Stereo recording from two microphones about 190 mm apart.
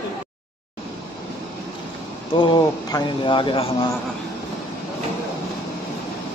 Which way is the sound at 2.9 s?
25° left (ahead or behind).